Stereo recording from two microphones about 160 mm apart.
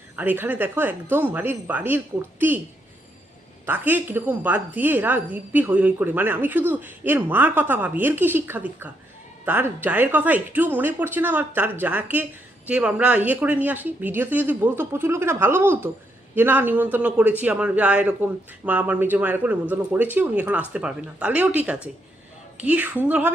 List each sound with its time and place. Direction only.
0.2 s speech: 10° right (ahead or behind)
3.7 s speech: 10° right (ahead or behind)